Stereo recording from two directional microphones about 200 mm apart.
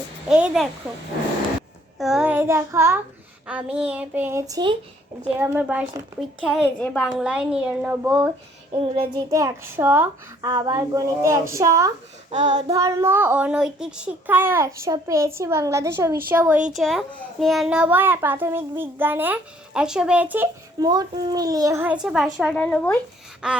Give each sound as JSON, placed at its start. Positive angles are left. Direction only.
{"t": 0.3, "sound": "a woman's voice", "side_deg": -5}
{"t": 2.0, "sound": "a child's voice", "side_deg": 0}
{"t": 5.4, "sound": "a child's voice", "side_deg": -5}
{"t": 8.7, "sound": "a child's voice", "side_deg": -25}
{"t": 12.3, "sound": "child singing", "side_deg": -35}
{"t": 12.7, "sound": "a child's voice", "side_deg": -15}
{"t": 16.7, "sound": "a child's voice", "side_deg": 0}
{"t": 20.7, "sound": "a child's voice", "side_deg": -20}
{"t": 23.4, "sound": "a woman's voice", "side_deg": -5}